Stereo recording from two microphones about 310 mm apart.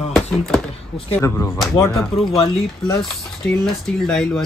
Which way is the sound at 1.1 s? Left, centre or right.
Centre.